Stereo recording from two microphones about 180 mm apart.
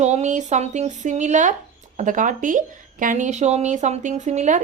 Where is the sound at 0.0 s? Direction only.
40° right (ahead or behind).